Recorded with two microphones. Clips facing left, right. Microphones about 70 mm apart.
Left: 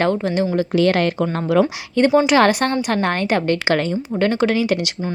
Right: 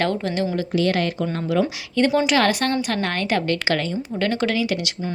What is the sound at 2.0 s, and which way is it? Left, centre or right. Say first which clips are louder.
A woman's voice: left 4 dB; left.